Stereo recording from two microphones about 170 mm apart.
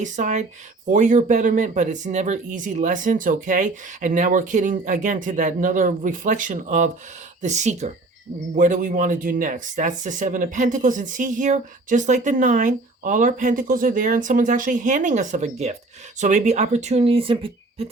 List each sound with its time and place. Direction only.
0.0 s speech: 45° right (ahead or behind)